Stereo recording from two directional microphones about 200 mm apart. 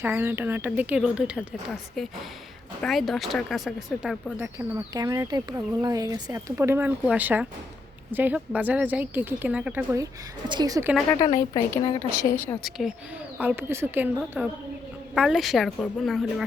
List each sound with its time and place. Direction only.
0.0 s speech: 10° right (ahead or behind)
11.1 s a woman's voice: 20° left (ahead or behind)
12.5 s speech: centre (ahead or behind)